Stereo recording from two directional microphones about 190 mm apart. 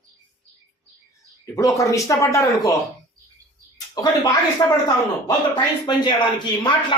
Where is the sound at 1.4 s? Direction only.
15° left (ahead or behind).